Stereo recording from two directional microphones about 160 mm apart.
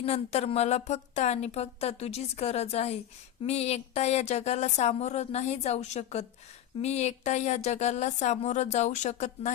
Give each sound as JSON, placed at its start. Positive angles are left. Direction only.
{"t": 0.0, "sound": "speech", "side_deg": 40}